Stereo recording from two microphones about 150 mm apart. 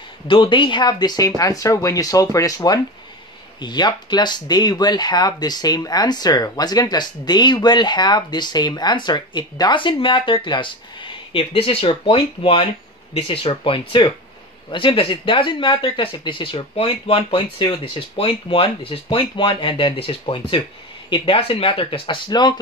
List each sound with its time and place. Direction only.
0.3 s speech: 35° left (ahead or behind)